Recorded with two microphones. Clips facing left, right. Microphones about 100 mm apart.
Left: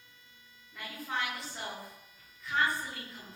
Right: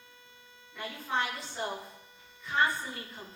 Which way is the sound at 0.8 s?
30° right (ahead or behind).